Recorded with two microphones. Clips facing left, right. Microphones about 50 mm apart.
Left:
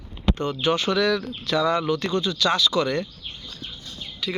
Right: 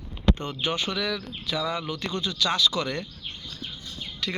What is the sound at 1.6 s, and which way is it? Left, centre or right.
Speech, left.